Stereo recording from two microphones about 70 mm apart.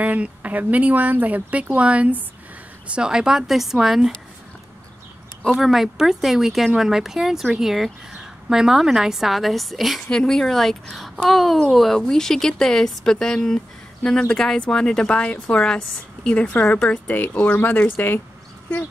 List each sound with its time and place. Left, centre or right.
0.0 s speech: right
2.9 s speech: centre
5.4 s speech: centre
17.1 s speech: left